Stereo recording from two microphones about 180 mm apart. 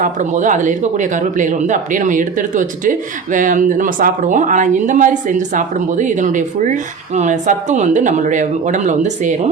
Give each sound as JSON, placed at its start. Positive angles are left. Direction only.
{"t": 0.0, "sound": "speech", "side_deg": -45}